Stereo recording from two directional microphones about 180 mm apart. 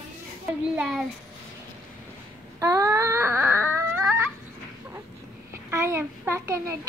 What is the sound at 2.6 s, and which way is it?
Baby cry, 20° right (ahead or behind).